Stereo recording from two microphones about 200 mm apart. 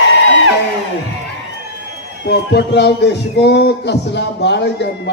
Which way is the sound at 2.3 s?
60° left (ahead or behind).